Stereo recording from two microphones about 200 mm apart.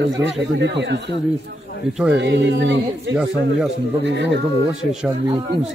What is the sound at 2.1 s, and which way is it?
Speech, 60° right (ahead or behind).